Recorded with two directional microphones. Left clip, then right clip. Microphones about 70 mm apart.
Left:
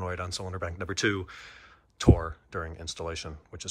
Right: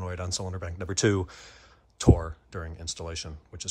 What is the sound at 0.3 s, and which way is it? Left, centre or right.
Speech, right.